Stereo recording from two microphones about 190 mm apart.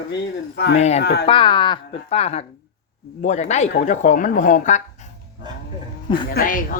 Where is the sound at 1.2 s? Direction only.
25° left (ahead or behind).